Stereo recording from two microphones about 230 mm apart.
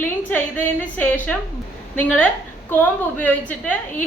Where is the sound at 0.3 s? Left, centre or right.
Centre.